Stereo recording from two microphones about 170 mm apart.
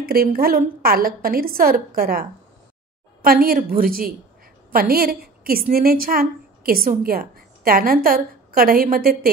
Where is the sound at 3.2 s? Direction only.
60° right (ahead or behind).